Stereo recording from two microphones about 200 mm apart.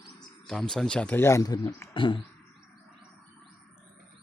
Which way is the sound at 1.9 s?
25° left (ahead or behind).